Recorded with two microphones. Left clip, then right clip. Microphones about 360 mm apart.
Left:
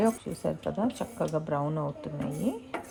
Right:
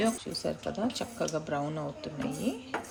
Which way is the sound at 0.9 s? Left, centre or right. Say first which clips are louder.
Left 2 dB; centre.